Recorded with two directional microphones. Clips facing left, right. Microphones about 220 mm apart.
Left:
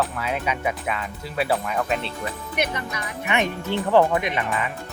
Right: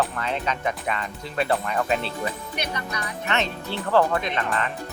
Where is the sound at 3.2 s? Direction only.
15° left (ahead or behind).